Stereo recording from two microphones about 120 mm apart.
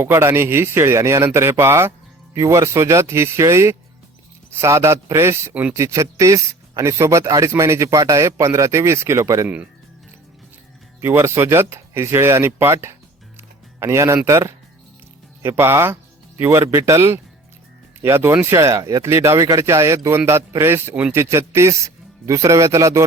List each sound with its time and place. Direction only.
0.0 s speech: 20° right (ahead or behind)
11.0 s speech: 20° right (ahead or behind)